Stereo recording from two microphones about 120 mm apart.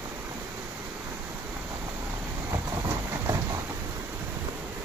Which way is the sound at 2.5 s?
25° right (ahead or behind).